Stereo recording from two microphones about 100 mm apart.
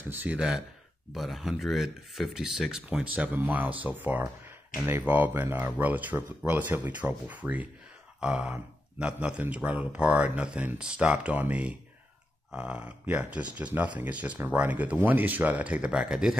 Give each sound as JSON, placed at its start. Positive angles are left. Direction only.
{"t": 0.1, "sound": "speech", "side_deg": -15}